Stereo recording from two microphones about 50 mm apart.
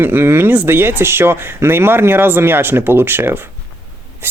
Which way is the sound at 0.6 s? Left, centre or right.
Right.